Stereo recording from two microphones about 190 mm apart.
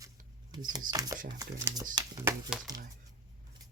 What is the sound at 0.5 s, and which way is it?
Speech, 20° right (ahead or behind).